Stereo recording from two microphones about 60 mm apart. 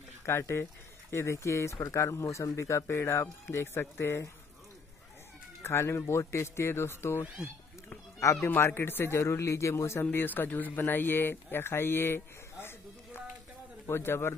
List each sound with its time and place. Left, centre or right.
0.2 s speech: left
5.6 s speech: left
8.2 s speech: left
8.5 s speech: left
10.1 s speech: left